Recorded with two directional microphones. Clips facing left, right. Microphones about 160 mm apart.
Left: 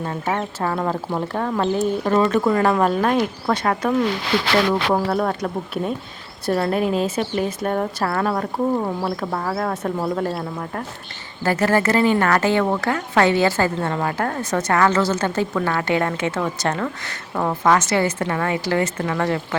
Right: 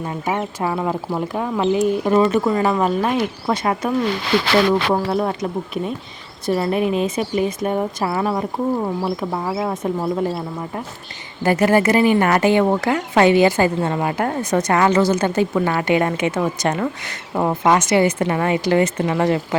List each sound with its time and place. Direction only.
0.0 s speech: 10° right (ahead or behind)
6.5 s a woman's voice: 5° right (ahead or behind)